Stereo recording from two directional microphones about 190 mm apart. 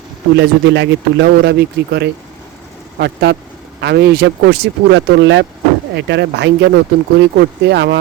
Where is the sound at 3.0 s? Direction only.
60° right (ahead or behind).